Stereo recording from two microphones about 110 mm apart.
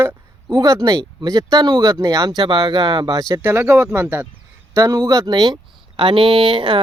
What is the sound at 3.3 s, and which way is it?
A man's voice, 20° right (ahead or behind).